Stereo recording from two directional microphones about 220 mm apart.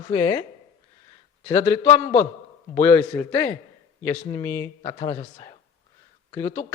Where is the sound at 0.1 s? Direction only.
15° left (ahead or behind).